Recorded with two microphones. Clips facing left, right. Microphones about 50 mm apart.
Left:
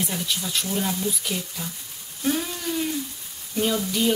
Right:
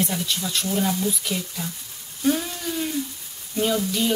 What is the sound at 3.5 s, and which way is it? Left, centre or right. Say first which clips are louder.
Frying: right 1 dB; centre.